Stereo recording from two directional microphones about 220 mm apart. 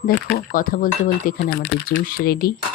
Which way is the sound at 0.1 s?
40° left (ahead or behind).